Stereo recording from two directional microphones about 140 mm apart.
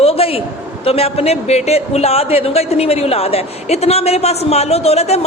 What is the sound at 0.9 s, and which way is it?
A man's voice, 45° left (ahead or behind).